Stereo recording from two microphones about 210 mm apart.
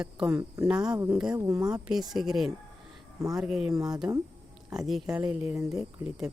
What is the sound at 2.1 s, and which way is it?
Speech, centre (ahead or behind).